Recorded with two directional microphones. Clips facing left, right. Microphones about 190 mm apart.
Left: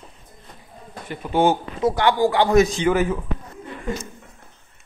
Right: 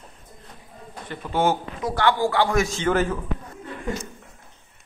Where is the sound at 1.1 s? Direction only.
15° left (ahead or behind).